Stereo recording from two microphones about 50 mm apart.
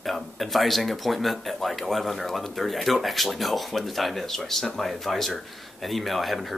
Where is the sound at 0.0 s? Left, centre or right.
Centre.